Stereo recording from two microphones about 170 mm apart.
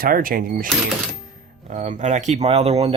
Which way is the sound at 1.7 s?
45° right (ahead or behind).